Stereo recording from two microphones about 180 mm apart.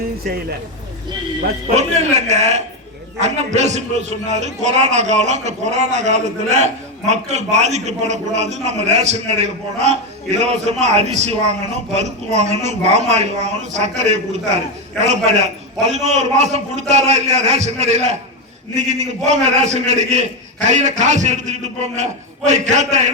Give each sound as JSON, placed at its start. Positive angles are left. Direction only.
{"t": 1.7, "sound": "a man's voice", "side_deg": -40}